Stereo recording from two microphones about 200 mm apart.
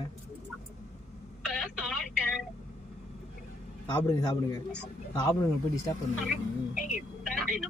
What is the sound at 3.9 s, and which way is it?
Speech, 20° left (ahead or behind).